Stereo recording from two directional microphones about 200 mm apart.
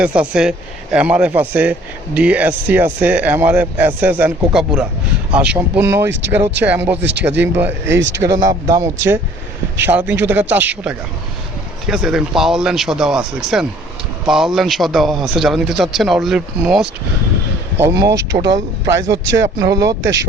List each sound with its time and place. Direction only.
0.0 s a man's voice: 5° right (ahead or behind)
7.9 s speech: 65° right (ahead or behind)
8.4 s a man's voice: 20° right (ahead or behind); by 16.4 s centre (ahead or behind)
17.7 s speech: 15° right (ahead or behind)
18.3 s speech: 40° right (ahead or behind)
19.1 s speech: 65° right (ahead or behind)
19.5 s speech: 20° right (ahead or behind)
20.0 s speech: 65° right (ahead or behind)